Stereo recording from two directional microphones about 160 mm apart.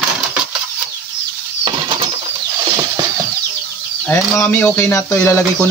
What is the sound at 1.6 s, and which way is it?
Bird flight, 35° right (ahead or behind).